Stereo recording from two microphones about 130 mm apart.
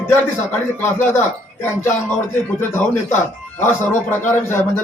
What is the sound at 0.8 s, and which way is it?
Speech, 15° left (ahead or behind).